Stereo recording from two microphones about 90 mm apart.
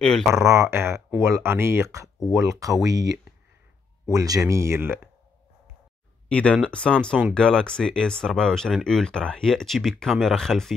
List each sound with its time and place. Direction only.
0.3 s speech: 30° right (ahead or behind)
6.2 s speech: 10° left (ahead or behind)